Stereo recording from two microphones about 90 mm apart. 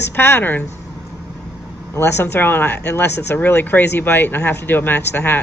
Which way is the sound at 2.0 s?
30° left (ahead or behind).